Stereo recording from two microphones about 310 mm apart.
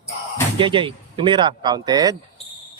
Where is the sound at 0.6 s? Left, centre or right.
Centre.